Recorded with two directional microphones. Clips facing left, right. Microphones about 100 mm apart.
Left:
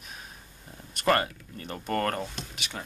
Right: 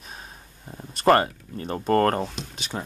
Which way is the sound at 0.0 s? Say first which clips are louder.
Right 3 dB; 35° right (ahead or behind).